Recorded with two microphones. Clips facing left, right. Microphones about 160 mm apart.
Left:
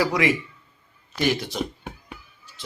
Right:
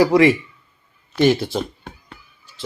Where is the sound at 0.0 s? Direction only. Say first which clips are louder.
Right 8 dB; 25° right (ahead or behind).